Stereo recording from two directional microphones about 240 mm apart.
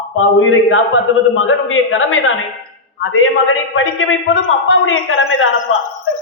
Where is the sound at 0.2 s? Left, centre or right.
Left.